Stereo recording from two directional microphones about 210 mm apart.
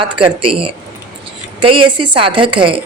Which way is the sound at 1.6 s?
25° right (ahead or behind).